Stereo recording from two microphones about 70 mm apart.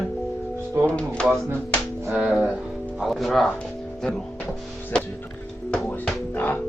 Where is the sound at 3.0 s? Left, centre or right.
Centre.